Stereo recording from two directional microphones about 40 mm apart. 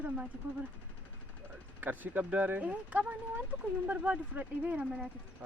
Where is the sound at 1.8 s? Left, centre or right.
Right.